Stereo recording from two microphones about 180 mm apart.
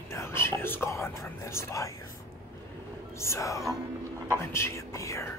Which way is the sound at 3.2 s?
15° left (ahead or behind).